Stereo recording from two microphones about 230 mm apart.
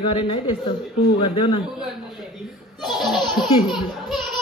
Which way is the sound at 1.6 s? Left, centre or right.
Centre.